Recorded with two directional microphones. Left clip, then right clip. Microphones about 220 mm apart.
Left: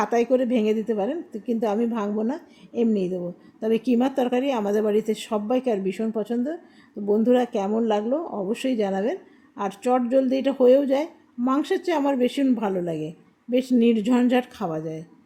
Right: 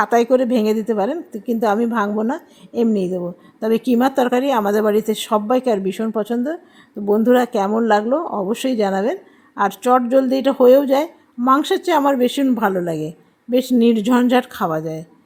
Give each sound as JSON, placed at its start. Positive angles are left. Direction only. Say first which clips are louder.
{"t": 0.0, "sound": "speech", "louder": "right 6 dB", "side_deg": -15}